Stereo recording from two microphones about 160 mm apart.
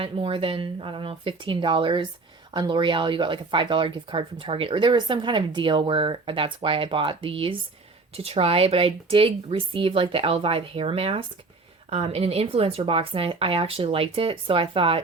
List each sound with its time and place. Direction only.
0.0 s speech: 35° right (ahead or behind)